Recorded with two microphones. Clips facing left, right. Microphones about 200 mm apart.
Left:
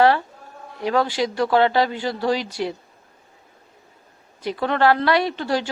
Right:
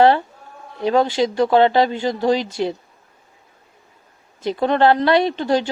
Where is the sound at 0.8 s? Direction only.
25° right (ahead or behind).